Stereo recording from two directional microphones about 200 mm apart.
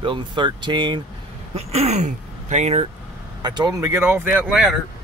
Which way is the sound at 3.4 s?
20° right (ahead or behind).